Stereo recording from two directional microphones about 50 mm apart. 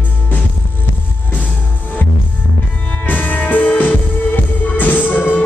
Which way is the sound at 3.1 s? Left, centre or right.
Left.